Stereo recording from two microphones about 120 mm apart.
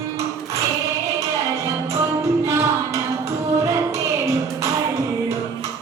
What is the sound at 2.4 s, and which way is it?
Music, 25° right (ahead or behind).